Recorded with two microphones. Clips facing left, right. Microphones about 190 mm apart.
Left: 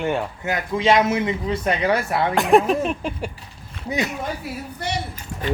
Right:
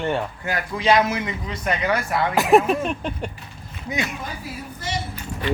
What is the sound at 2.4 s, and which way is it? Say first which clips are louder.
Speech: even; centre (ahead or behind).